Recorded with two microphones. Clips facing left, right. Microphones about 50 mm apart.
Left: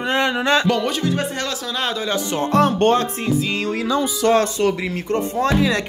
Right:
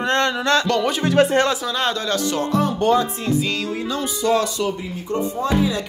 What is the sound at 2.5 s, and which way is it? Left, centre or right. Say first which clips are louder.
Speech: left 3 dB; left.